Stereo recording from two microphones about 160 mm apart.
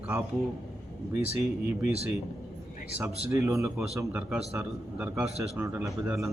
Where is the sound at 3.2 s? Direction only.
15° right (ahead or behind).